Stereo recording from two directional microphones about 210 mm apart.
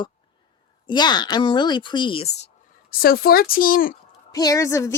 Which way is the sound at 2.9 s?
45° left (ahead or behind).